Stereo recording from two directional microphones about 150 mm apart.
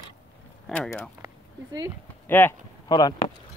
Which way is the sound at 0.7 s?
10° left (ahead or behind).